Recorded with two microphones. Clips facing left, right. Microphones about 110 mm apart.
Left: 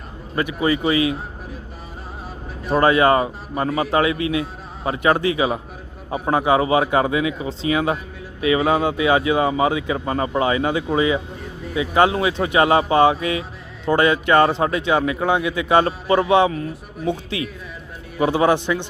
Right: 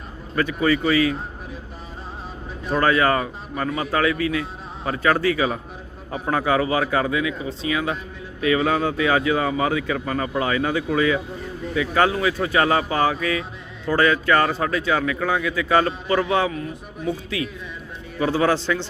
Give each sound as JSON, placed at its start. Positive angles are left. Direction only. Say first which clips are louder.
{"t": 0.3, "sound": "speech", "louder": "even", "side_deg": 15}
{"t": 2.8, "sound": "speech", "louder": "left 4 dB", "side_deg": 20}
{"t": 3.5, "sound": "speech", "louder": "left 4 dB", "side_deg": 35}
{"t": 8.4, "sound": "speech", "louder": "left 2 dB", "side_deg": 15}
{"t": 16.0, "sound": "a man's voice", "louder": "left 5 dB", "side_deg": 35}